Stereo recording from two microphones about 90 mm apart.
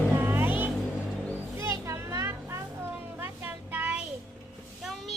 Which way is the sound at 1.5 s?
30° right (ahead or behind).